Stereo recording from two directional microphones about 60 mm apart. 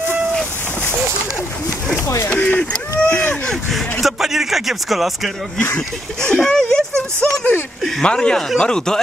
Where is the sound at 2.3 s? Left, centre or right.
Left.